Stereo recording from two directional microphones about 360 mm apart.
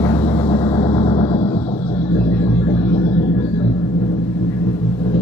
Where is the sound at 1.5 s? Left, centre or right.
Centre.